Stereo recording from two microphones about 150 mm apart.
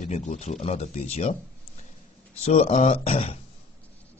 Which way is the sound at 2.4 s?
45° left (ahead or behind).